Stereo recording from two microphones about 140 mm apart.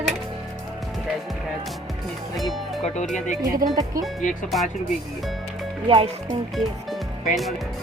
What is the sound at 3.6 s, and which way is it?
Speech, 90° right.